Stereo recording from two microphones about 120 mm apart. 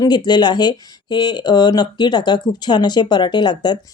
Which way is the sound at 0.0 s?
35° left (ahead or behind).